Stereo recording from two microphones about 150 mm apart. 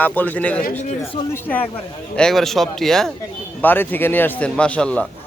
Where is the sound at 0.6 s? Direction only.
65° left (ahead or behind).